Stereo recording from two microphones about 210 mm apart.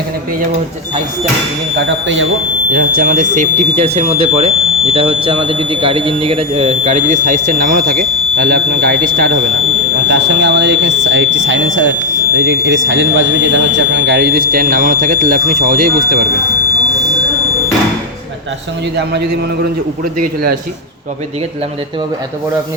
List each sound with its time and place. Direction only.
2.7 s speech: 45° right (ahead or behind)
10.1 s speech: 55° right (ahead or behind)
20.1 s speech: 45° right (ahead or behind)